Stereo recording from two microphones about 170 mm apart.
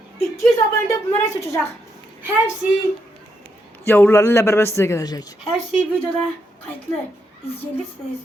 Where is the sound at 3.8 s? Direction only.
10° left (ahead or behind).